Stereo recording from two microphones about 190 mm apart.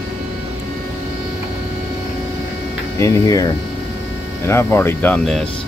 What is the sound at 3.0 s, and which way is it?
Creak, 15° left (ahead or behind).